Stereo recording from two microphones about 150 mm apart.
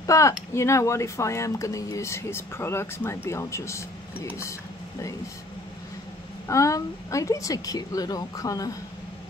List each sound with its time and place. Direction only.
0.0 s speech: 20° left (ahead or behind)
6.4 s speech: 20° left (ahead or behind)